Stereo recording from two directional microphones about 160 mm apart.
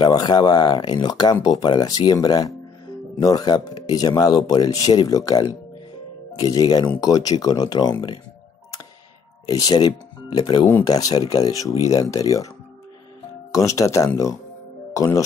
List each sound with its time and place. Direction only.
0.0 s speech: 25° left (ahead or behind)
9.5 s speech: 25° left (ahead or behind)
13.5 s speech: 20° left (ahead or behind)